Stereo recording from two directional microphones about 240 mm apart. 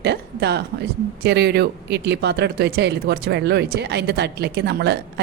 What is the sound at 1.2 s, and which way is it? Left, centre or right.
Speech, right.